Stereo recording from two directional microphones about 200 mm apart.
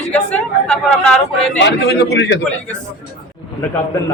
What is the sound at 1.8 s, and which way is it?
Speech, 60° left (ahead or behind).